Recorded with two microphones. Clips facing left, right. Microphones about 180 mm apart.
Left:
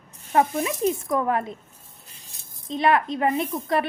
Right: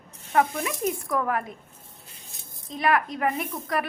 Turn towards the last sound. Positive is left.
turn(degrees=25)  # may be behind; listen again after turning